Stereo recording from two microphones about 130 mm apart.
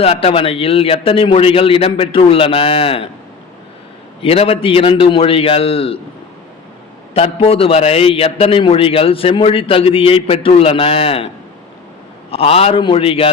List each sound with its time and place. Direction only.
0.0 s a man's voice: 50° left (ahead or behind)
4.2 s a man's voice: 45° left (ahead or behind)
7.1 s a man's voice: 45° left (ahead or behind)
12.3 s a man's voice: 50° left (ahead or behind)